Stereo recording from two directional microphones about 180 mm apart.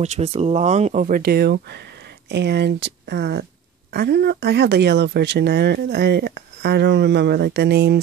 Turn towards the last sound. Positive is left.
turn(degrees=-65)  # may be behind; listen again after turning